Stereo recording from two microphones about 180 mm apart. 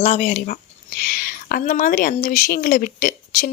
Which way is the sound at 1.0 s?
50° left (ahead or behind).